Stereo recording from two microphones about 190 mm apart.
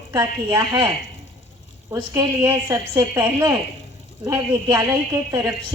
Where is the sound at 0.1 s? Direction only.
15° right (ahead or behind).